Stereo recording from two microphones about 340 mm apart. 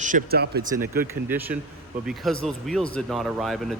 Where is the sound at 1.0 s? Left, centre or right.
Centre.